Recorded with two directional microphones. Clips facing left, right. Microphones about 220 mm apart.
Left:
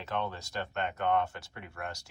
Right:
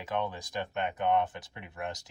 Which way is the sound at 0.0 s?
10° right (ahead or behind).